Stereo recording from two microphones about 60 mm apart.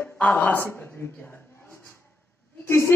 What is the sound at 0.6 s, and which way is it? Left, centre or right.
Speech, left.